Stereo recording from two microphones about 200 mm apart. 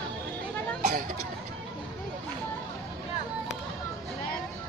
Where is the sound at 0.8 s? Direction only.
40° right (ahead or behind).